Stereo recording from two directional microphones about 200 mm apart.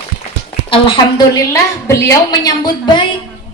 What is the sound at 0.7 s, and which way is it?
Speech, 25° left (ahead or behind).